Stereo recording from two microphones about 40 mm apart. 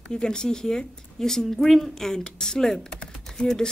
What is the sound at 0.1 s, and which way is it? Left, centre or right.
A woman's voice, centre.